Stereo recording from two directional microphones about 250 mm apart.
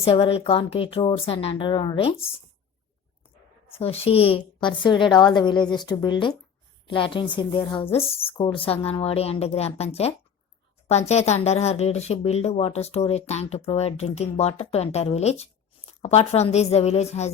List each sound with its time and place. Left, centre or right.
0.0 s speech: left
3.7 s speech: left